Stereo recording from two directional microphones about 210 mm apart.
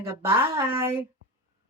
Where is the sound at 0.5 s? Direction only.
10° right (ahead or behind).